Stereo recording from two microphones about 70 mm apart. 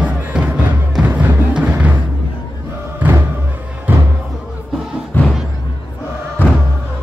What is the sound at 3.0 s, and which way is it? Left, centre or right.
Music, right.